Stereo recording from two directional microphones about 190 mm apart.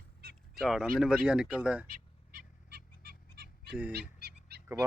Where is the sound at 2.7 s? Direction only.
55° right (ahead or behind).